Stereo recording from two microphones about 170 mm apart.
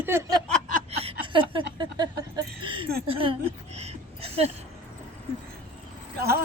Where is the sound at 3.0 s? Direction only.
35° right (ahead or behind).